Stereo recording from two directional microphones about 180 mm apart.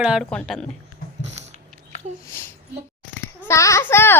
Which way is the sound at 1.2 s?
40° right (ahead or behind).